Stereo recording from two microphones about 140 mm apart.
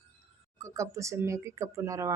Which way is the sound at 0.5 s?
20° right (ahead or behind).